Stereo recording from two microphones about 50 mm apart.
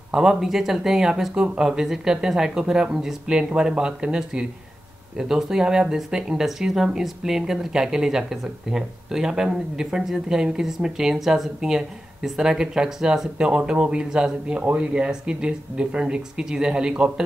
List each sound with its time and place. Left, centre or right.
0.1 s speech: centre